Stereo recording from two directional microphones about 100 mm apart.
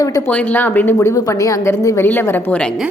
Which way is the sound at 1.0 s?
35° left (ahead or behind).